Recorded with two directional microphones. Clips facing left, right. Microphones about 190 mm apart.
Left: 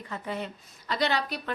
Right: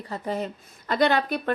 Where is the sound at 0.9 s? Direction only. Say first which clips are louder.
Right 6 dB; 50° right (ahead or behind).